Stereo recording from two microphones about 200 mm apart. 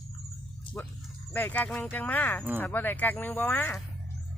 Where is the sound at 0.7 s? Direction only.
25° left (ahead or behind).